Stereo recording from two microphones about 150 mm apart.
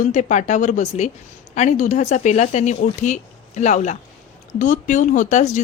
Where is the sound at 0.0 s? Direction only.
55° left (ahead or behind).